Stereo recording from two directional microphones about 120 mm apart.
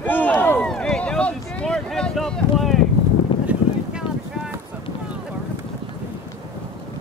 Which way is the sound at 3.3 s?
45° left (ahead or behind).